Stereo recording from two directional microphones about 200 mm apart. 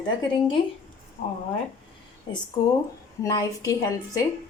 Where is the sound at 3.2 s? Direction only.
15° left (ahead or behind).